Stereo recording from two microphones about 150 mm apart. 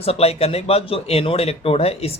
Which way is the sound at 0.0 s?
40° left (ahead or behind).